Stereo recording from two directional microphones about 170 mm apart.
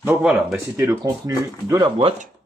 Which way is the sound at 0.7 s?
20° right (ahead or behind).